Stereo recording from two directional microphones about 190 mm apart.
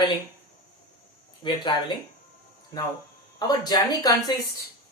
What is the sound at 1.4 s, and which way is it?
Speech, 25° left (ahead or behind).